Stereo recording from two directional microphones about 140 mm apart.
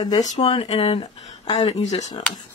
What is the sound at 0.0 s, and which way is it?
Speech, 30° left (ahead or behind).